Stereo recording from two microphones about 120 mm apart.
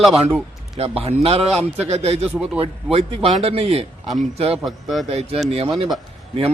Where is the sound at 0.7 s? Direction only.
55° right (ahead or behind).